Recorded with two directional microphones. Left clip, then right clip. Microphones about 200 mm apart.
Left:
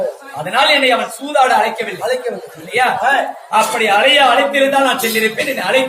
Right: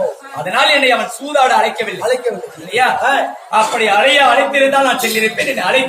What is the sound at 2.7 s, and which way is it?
A man's voice, centre (ahead or behind).